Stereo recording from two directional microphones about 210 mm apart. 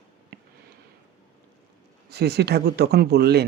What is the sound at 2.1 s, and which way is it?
Speech, 50° right (ahead or behind).